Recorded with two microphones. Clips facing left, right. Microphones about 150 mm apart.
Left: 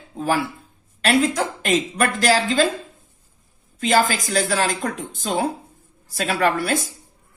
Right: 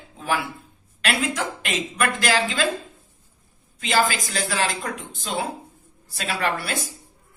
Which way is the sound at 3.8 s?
45° left (ahead or behind).